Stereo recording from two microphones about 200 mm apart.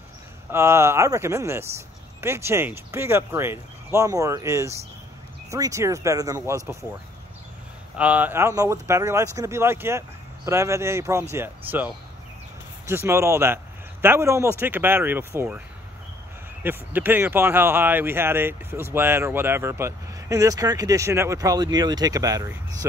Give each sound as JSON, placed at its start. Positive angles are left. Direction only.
{"t": 0.5, "sound": "speech", "side_deg": -15}
{"t": 8.0, "sound": "speech", "side_deg": -10}
{"t": 16.6, "sound": "speech", "side_deg": -10}